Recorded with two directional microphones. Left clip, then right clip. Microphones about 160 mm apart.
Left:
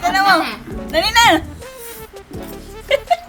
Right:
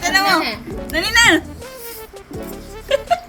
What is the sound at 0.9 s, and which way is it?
Speech, 20° left (ahead or behind).